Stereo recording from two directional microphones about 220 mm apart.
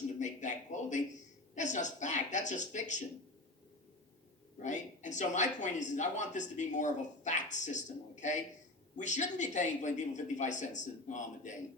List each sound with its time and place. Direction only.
0.2 s speech: 35° left (ahead or behind)
4.6 s speech: 35° left (ahead or behind)